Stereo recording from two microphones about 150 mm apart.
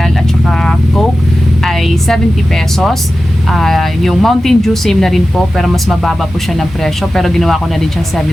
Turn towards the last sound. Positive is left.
turn(degrees=0)  # may be behind; listen again after turning